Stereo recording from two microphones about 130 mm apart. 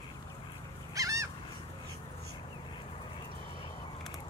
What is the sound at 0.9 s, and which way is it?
Bird, 25° right (ahead or behind).